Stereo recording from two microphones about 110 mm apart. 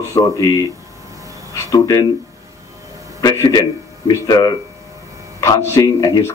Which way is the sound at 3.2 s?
35° left (ahead or behind).